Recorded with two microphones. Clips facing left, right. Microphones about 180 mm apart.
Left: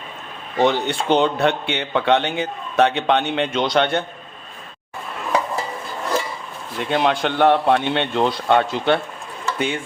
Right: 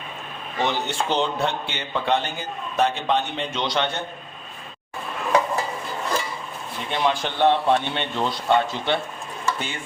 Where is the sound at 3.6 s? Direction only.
55° left (ahead or behind).